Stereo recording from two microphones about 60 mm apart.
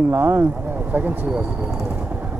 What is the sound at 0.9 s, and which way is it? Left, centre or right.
Speech, right.